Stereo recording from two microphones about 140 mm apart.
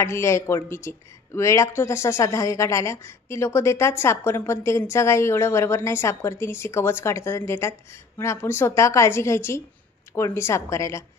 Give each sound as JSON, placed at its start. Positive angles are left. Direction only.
{"t": 0.0, "sound": "speech", "side_deg": 20}